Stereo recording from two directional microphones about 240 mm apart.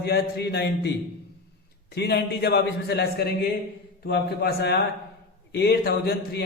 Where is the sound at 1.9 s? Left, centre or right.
Left.